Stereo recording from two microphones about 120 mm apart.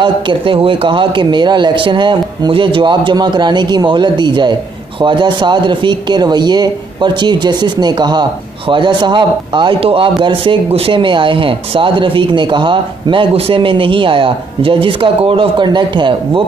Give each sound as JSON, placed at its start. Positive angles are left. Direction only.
{"t": 0.0, "sound": "a man's voice", "side_deg": -45}